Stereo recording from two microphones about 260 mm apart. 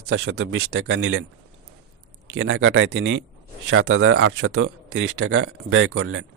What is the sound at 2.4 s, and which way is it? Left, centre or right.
A man's voice, right.